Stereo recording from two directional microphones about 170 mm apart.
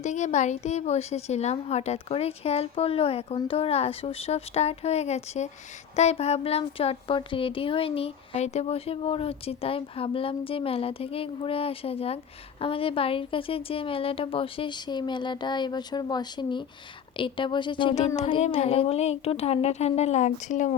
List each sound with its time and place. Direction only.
0.0 s speech: 45° left (ahead or behind)